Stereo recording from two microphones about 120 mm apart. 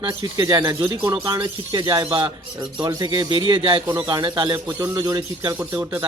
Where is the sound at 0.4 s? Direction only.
25° right (ahead or behind).